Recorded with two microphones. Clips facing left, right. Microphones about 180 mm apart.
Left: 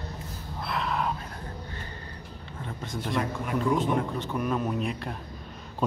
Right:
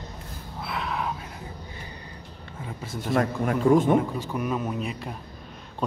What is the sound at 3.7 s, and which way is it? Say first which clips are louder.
Speech: right 8 dB; 50° right (ahead or behind).